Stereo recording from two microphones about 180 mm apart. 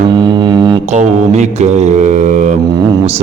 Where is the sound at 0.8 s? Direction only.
40° right (ahead or behind).